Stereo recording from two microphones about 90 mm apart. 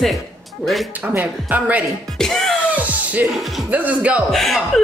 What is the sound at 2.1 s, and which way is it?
Music, 5° left (ahead or behind).